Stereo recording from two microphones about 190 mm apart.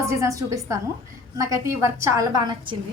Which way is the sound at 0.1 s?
15° right (ahead or behind).